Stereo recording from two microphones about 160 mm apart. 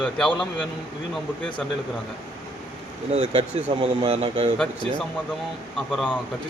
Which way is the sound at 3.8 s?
30° right (ahead or behind).